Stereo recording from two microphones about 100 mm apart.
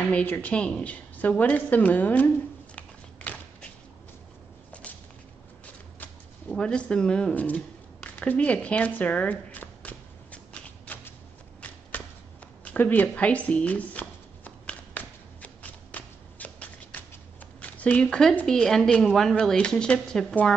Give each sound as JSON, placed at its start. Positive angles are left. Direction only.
{"t": 0.1, "sound": "a woman's voice", "side_deg": 20}
{"t": 2.7, "sound": "a sound", "side_deg": 15}
{"t": 6.5, "sound": "speech", "side_deg": 10}
{"t": 10.9, "sound": "a sound", "side_deg": 15}
{"t": 12.6, "sound": "shuffling cards", "side_deg": 15}
{"t": 17.6, "sound": "a woman's voice", "side_deg": 15}